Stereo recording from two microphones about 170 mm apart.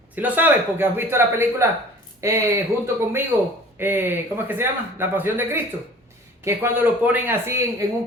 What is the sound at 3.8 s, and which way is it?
Speech, 15° right (ahead or behind).